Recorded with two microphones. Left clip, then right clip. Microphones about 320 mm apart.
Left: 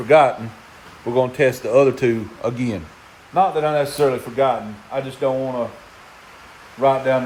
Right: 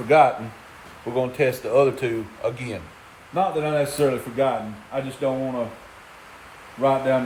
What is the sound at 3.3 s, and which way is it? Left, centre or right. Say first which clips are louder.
A man's voice: left 5 dB; centre.